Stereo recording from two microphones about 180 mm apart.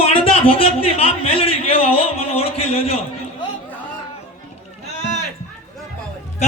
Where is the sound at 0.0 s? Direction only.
30° left (ahead or behind).